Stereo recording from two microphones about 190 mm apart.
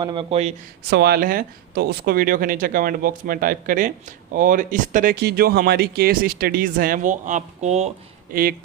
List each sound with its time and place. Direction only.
0.0 s speech: 25° right (ahead or behind)
0.9 s speech: 60° right (ahead or behind); by 7.9 s 35° right (ahead or behind)
8.3 s speech: 50° right (ahead or behind)